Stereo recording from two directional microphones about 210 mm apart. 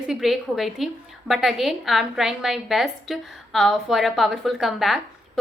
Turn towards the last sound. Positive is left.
turn(degrees=0)  # may be behind; listen again after turning